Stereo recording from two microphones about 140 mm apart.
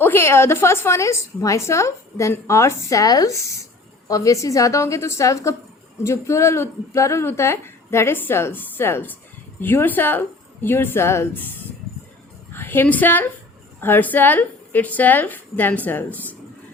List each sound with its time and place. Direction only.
0.0 s a woman's voice: 15° left (ahead or behind)
12.5 s a woman's voice: 15° left (ahead or behind)